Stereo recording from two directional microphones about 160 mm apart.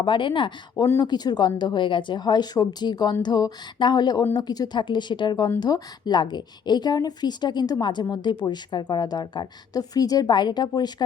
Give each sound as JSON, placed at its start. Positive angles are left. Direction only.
{"t": 0.0, "sound": "a woman's voice", "side_deg": 30}